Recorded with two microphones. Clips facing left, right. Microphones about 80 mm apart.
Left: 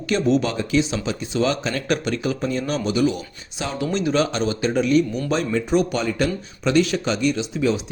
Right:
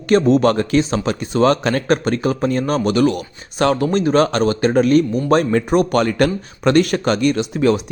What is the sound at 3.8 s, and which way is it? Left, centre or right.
Speech, right.